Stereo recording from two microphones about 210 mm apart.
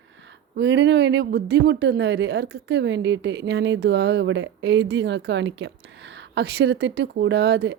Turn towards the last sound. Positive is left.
turn(degrees=-55)  # may be behind; listen again after turning